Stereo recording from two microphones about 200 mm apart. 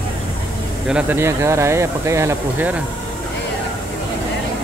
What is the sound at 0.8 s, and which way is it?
Speech, 10° right (ahead or behind).